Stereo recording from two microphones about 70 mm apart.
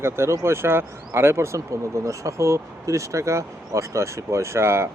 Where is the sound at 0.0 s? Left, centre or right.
Right.